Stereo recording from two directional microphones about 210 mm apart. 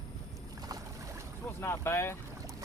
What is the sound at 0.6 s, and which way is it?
Boat, 15° right (ahead or behind).